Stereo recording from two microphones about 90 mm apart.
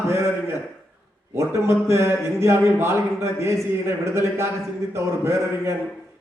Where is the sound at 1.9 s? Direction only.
30° right (ahead or behind).